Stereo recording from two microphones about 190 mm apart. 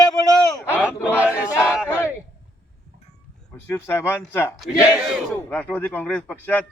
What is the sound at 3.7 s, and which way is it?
Speech, 10° left (ahead or behind).